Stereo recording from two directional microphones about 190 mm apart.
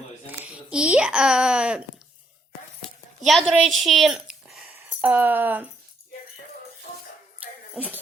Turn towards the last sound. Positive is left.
turn(degrees=-10)  # may be behind; listen again after turning